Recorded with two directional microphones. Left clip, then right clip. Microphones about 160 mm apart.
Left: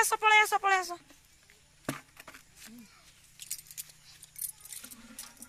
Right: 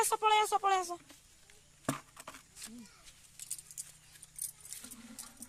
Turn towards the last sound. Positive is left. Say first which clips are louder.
# left 3 dB
turn(degrees=-10)  # may be behind; listen again after turning